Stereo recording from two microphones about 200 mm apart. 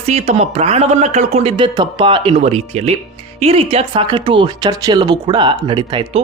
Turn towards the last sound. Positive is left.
turn(degrees=-25)  # may be behind; listen again after turning